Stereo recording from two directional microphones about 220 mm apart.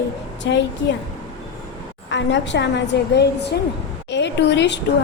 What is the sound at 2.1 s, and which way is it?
A woman's voice, 55° left (ahead or behind).